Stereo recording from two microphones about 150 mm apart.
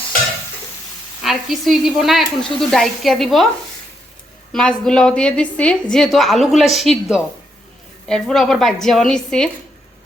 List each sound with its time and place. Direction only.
1.2 s a woman's voice: centre (ahead or behind)
4.5 s a woman's voice: 5° left (ahead or behind)